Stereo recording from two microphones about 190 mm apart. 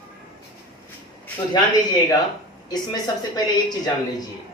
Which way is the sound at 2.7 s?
20° left (ahead or behind).